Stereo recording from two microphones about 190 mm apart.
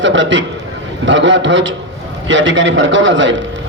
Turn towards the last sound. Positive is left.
turn(degrees=-75)  # may be behind; listen again after turning